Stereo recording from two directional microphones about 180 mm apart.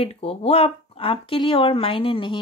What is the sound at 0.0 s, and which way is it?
Speech, 30° left (ahead or behind).